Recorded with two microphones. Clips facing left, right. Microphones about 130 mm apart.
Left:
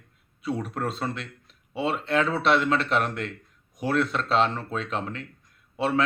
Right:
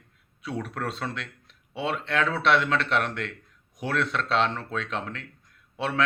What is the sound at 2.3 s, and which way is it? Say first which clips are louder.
Speech: right 1 dB; 35° left (ahead or behind).